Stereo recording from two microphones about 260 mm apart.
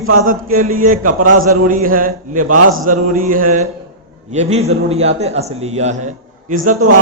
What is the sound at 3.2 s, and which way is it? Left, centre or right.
A man's voice, right.